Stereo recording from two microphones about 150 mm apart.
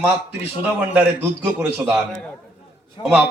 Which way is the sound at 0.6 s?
10° right (ahead or behind).